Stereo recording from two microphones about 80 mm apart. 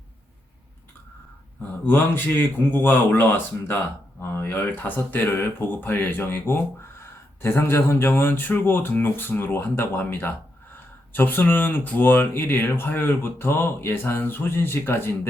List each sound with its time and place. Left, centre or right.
1.8 s speech: left